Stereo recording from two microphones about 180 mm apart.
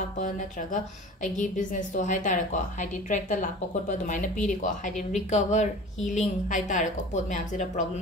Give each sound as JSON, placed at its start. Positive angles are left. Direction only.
{"t": 0.2, "sound": "a woman's voice", "side_deg": 45}